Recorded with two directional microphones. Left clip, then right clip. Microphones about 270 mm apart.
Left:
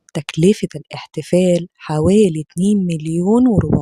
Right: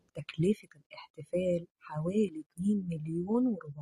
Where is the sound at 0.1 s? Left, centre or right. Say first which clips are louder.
Left 17 dB; left.